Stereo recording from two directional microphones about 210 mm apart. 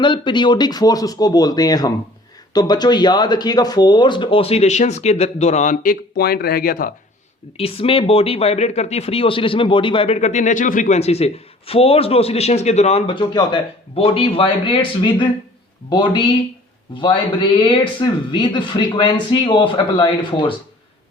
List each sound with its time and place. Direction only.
0.0 s speech: 20° left (ahead or behind); by 6.9 s 45° left (ahead or behind)
7.5 s speech: 25° left (ahead or behind)